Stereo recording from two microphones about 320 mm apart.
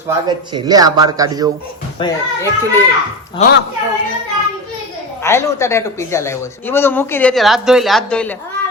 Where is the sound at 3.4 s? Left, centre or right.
Centre.